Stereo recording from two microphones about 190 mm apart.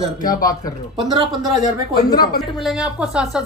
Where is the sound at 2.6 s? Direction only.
5° right (ahead or behind).